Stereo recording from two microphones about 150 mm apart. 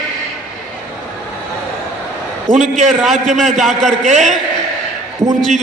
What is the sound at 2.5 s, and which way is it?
Speech, 50° right (ahead or behind).